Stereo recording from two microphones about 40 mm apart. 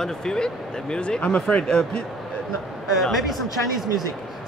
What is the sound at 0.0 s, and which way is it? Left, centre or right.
Speech, centre.